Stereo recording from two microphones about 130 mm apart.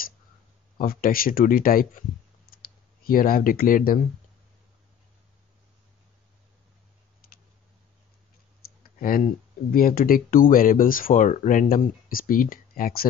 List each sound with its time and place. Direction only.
0.7 s speech: 90° left
3.1 s speech: 90° left
9.0 s speech: 90° left